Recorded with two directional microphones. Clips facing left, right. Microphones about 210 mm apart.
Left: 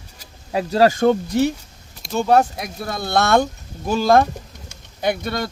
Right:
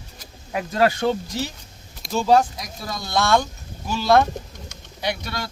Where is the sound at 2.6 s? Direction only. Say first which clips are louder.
Left 5 dB; 60° left (ahead or behind).